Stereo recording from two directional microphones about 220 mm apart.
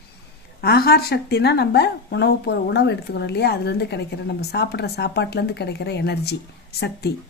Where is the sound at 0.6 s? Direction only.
45° left (ahead or behind).